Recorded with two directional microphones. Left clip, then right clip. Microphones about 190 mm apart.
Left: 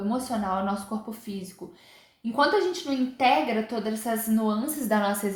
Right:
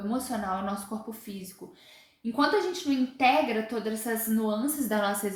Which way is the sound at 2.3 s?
30° left (ahead or behind).